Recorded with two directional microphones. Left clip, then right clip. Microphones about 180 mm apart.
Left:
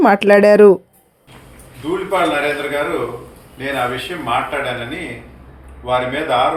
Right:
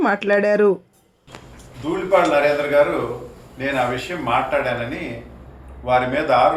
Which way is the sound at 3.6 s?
5° right (ahead or behind).